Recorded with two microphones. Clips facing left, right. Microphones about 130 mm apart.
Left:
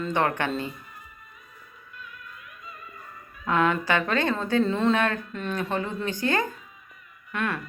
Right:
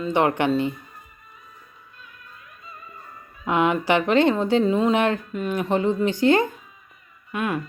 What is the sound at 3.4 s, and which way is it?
A woman's voice, 15° right (ahead or behind).